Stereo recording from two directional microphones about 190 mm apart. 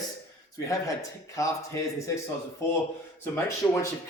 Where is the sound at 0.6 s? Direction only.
15° left (ahead or behind).